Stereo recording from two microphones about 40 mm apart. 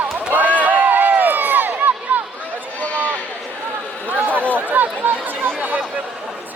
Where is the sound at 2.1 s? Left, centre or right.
Right.